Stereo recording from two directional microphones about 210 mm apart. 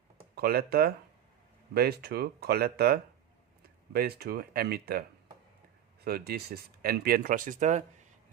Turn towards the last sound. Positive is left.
turn(degrees=-35)  # may be behind; listen again after turning